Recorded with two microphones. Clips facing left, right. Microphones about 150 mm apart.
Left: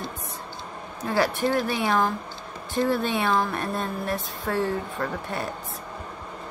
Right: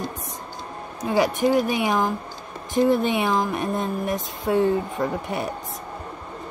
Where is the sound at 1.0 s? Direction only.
15° right (ahead or behind).